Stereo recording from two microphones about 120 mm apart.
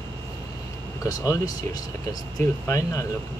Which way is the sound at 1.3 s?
30° left (ahead or behind).